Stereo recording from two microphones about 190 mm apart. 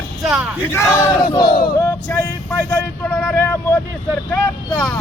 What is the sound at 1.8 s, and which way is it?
Speech, 15° left (ahead or behind).